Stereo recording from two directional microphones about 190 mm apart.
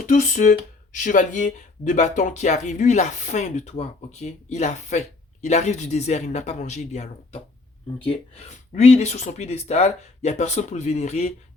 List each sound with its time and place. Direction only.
0.0 s speech: 40° left (ahead or behind)